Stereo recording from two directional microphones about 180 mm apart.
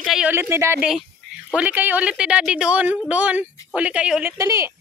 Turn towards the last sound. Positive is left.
turn(degrees=-15)  # may be behind; listen again after turning